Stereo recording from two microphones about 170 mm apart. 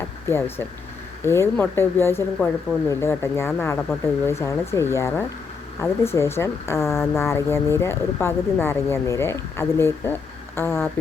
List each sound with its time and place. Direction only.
0.3 s speech: 15° left (ahead or behind)